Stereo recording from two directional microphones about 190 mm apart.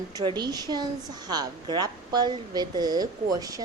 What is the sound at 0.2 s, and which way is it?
A woman's voice, 20° right (ahead or behind).